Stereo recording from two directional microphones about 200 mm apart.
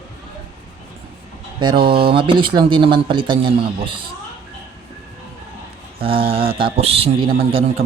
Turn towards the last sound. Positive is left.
turn(degrees=-25)  # may be behind; listen again after turning